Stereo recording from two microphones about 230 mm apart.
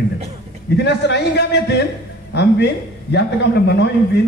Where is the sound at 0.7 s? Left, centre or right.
Left.